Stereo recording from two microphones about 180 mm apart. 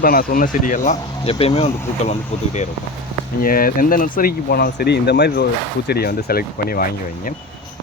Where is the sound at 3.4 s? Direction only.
55° left (ahead or behind).